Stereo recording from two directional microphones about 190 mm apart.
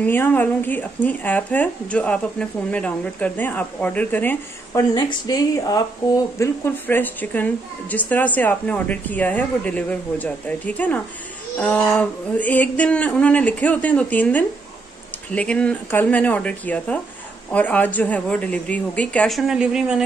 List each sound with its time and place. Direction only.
0.0 s speech: 10° left (ahead or behind)
4.9 s speech: 20° left (ahead or behind); by 20.0 s 5° right (ahead or behind)